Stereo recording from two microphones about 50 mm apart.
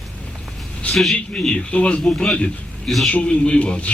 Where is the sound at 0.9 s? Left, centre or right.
Centre.